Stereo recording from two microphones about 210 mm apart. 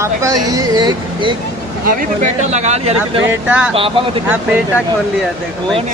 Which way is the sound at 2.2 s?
35° right (ahead or behind).